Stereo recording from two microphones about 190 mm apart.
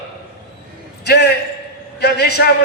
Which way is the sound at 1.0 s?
60° left (ahead or behind).